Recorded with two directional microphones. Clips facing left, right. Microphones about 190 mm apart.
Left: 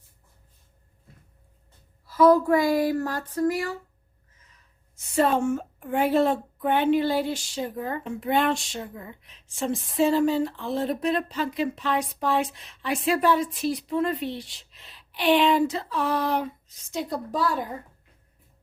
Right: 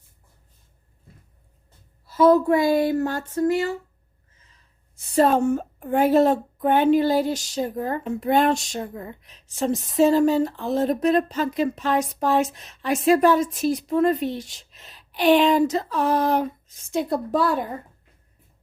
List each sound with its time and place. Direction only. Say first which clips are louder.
2.0 s speech: right 2 dB; 25° right (ahead or behind)
4.9 s a woman's voice: right 4 dB; 35° right (ahead or behind); by 17.6 s 60° right (ahead or behind)